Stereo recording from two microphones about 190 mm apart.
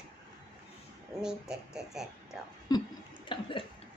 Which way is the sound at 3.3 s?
25° left (ahead or behind).